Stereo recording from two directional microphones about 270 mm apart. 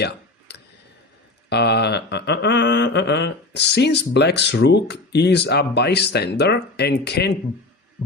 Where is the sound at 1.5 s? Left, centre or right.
Left.